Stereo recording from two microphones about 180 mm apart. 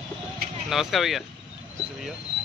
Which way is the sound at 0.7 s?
Centre (ahead or behind).